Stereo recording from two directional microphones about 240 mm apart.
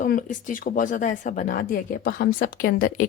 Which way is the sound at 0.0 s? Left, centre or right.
Left.